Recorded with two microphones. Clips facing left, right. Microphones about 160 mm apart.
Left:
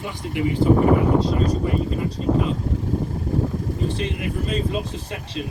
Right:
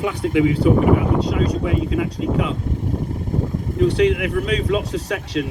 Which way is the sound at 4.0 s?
90° right.